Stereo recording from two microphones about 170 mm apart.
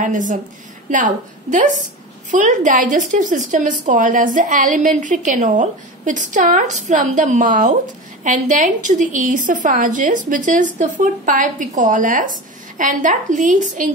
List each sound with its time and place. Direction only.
0.0 s a woman's voice: 50° right (ahead or behind)